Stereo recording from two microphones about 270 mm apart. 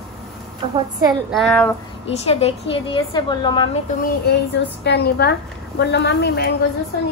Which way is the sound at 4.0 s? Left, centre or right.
Left.